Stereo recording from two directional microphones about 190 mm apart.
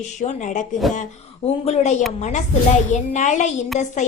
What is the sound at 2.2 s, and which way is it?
A woman's voice, 40° left (ahead or behind).